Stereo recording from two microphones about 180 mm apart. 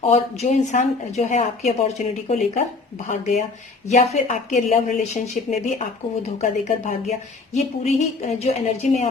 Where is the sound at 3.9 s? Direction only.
40° left (ahead or behind).